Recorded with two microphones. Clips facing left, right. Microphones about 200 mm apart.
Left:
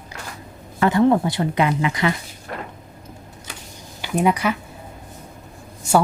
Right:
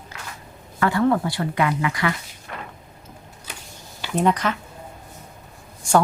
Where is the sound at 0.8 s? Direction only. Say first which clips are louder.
Left 3 dB; 20° left (ahead or behind).